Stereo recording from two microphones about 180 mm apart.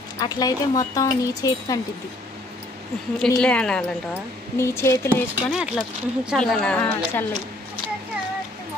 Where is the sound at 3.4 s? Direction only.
5° left (ahead or behind).